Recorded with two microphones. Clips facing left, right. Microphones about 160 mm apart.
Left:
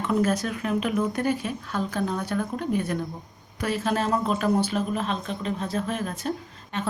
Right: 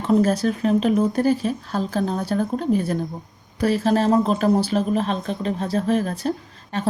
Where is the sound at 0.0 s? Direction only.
30° right (ahead or behind).